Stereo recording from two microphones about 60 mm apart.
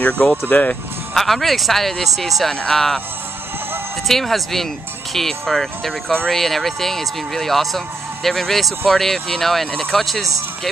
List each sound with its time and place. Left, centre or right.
0.5 s speech: left
1.1 s speech: centre
2.5 s speech: centre
4.1 s speech: centre